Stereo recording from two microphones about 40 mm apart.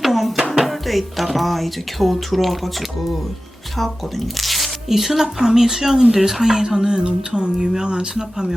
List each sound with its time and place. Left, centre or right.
0.0 s music: centre
0.5 s speech: centre